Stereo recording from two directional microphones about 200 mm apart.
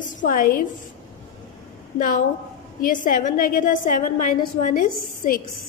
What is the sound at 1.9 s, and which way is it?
A woman's voice, 40° left (ahead or behind).